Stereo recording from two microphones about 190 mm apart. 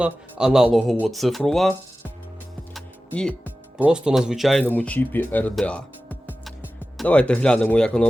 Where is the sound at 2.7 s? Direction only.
5° left (ahead or behind).